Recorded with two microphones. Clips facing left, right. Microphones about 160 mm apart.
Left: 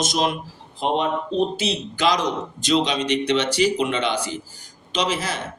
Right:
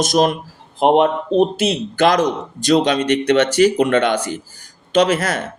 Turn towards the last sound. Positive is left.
turn(degrees=-55)  # may be behind; listen again after turning